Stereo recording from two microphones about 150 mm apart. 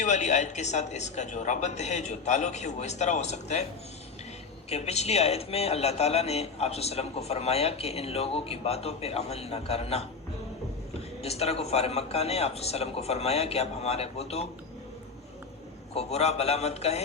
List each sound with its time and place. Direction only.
0.0 s speech: 50° left (ahead or behind)
4.7 s speech: 45° left (ahead or behind)
11.2 s speech: 45° left (ahead or behind)
16.0 s speech: 45° left (ahead or behind)